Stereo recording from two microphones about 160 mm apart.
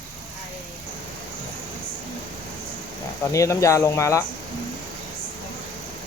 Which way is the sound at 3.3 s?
20° left (ahead or behind).